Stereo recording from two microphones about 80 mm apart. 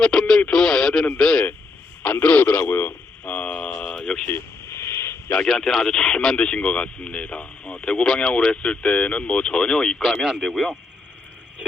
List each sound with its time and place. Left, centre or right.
0.0 s speech: centre
2.0 s speech: left
4.3 s radio: left
5.5 s speech: centre